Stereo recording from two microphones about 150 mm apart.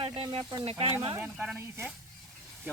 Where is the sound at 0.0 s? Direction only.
40° right (ahead or behind).